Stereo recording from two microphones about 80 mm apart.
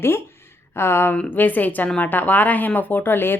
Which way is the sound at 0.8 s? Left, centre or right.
Left.